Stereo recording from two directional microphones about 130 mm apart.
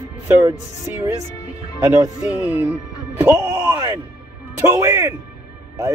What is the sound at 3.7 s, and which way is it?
A man's voice, 30° right (ahead or behind).